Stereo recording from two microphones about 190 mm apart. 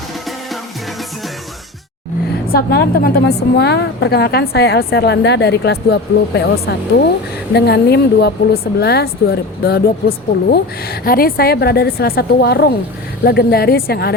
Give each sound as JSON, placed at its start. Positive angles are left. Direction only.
{"t": 2.5, "sound": "speech", "side_deg": 55}